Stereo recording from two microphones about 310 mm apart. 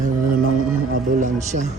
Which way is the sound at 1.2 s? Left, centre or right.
Right.